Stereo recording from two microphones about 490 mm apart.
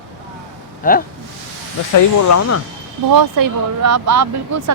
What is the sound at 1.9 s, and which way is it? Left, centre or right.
Speech, left.